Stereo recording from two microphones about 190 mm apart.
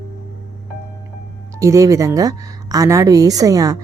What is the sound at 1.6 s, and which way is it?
A woman's voice, 15° right (ahead or behind).